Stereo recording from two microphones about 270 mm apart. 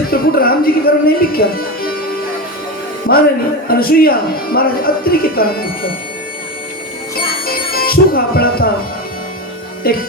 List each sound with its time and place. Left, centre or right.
0.1 s music: left
3.7 s speech: left
7.4 s music: left
9.8 s speech: left